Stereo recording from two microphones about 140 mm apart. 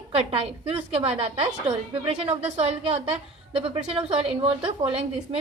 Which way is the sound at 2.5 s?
50° right (ahead or behind).